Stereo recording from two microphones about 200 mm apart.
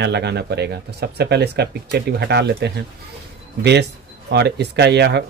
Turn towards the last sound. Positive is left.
turn(degrees=-55)  # may be behind; listen again after turning